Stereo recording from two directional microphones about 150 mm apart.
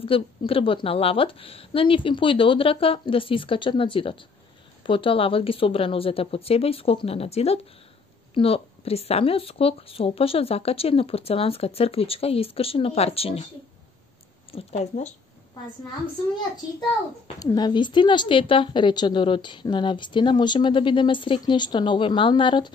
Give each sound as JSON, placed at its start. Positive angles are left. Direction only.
{"t": 0.1, "sound": "a woman's voice", "side_deg": 40}
{"t": 14.5, "sound": "speech", "side_deg": 45}
{"t": 17.4, "sound": "a woman's voice", "side_deg": 25}